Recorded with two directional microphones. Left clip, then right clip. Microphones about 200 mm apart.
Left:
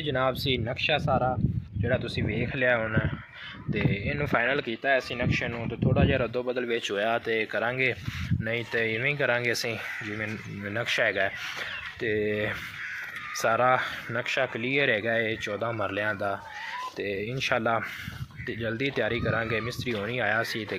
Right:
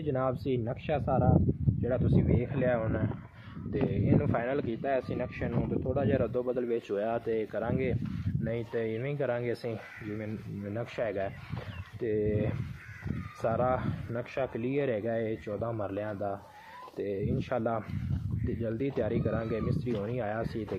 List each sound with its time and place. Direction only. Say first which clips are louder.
0.0 s speech: left 4 dB; 10° left (ahead or behind)
16.1 s speech: left 6 dB; 25° left (ahead or behind)
17.0 s speech: left 2 dB; 5° left (ahead or behind)